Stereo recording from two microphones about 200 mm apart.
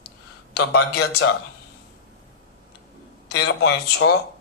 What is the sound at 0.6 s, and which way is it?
Speech, 90° left.